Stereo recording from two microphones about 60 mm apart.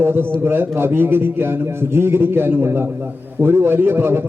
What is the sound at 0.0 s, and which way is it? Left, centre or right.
A man's voice, right.